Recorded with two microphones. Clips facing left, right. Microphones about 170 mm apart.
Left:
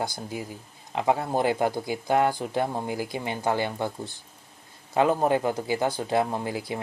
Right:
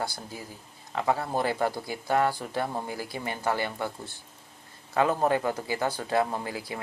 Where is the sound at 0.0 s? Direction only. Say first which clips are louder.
Left 4 dB; 20° left (ahead or behind).